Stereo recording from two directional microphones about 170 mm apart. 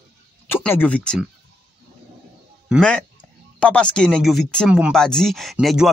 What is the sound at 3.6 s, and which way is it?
Speech, 5° left (ahead or behind).